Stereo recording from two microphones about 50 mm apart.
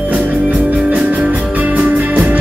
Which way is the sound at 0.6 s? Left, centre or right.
Right.